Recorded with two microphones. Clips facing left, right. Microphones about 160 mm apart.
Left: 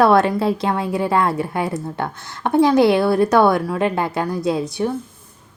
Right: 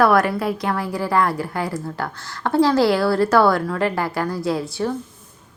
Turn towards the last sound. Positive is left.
turn(degrees=20)  # may be behind; listen again after turning